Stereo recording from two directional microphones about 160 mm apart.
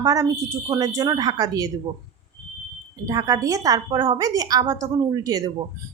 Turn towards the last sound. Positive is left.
turn(degrees=-25)  # may be behind; listen again after turning